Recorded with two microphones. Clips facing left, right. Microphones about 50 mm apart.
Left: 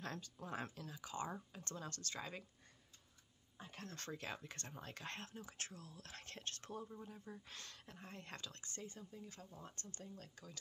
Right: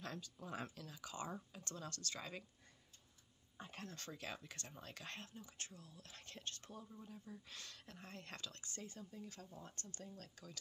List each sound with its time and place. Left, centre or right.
0.0 s speech: left
4.2 s speech: left
5.2 s speech: left
7.8 s speech: left
9.3 s speech: centre